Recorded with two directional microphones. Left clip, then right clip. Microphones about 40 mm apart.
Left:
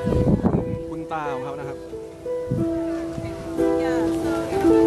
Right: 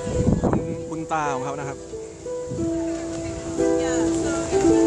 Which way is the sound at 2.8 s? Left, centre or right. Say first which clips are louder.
Left 1 dB; centre.